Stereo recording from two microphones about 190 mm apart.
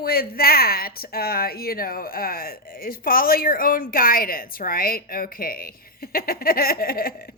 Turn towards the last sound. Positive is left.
turn(degrees=50)  # may be behind; listen again after turning